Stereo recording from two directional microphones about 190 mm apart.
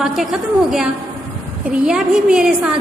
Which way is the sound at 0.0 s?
Centre (ahead or behind).